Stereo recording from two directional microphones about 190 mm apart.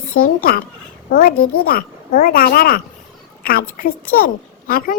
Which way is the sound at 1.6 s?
50° left (ahead or behind).